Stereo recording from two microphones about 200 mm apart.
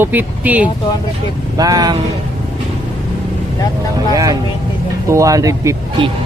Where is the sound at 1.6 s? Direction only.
20° right (ahead or behind).